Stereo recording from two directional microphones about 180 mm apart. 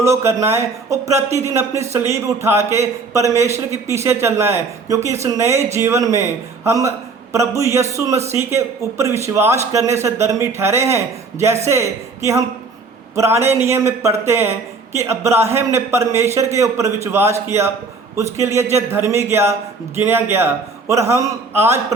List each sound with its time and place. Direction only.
0.0 s a man's voice: 15° right (ahead or behind)